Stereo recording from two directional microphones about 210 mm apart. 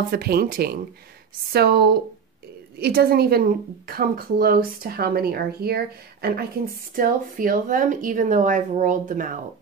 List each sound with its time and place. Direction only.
0.1 s a woman's voice: 45° right (ahead or behind)